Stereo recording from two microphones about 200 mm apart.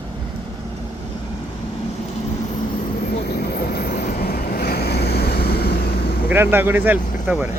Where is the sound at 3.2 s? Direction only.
50° left (ahead or behind).